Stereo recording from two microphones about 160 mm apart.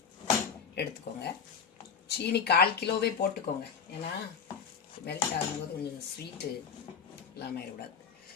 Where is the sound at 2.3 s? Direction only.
90° left.